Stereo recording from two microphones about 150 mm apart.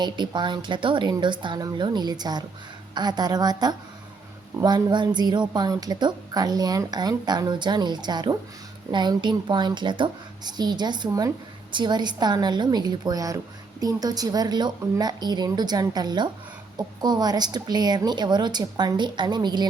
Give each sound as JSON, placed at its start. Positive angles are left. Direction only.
{"t": 0.0, "sound": "a woman's voice", "side_deg": -30}